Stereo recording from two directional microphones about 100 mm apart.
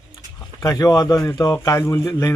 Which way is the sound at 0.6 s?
35° left (ahead or behind).